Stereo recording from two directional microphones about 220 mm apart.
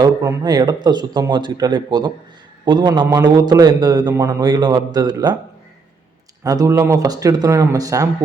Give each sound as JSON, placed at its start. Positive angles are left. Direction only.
{"t": 0.0, "sound": "a man's voice", "side_deg": -15}
{"t": 6.4, "sound": "speech", "side_deg": -15}